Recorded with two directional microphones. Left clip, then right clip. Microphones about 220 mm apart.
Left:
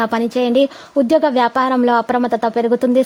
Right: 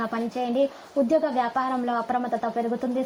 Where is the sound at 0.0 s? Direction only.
55° left (ahead or behind).